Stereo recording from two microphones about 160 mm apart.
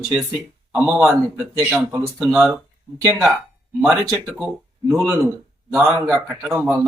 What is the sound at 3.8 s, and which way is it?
Speech, 15° right (ahead or behind).